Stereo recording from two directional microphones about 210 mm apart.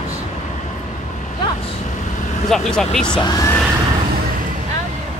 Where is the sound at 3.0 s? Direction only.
20° left (ahead or behind).